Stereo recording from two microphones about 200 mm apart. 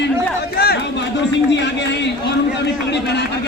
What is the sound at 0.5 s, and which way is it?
Chatter, 50° left (ahead or behind).